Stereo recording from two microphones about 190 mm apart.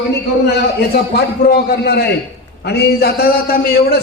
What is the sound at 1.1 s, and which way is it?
A man's voice, 55° left (ahead or behind).